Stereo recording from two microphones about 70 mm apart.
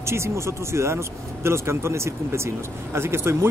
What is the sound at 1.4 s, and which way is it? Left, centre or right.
Speech, right.